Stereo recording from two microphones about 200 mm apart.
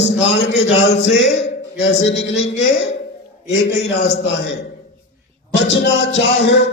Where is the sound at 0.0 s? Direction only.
65° left (ahead or behind).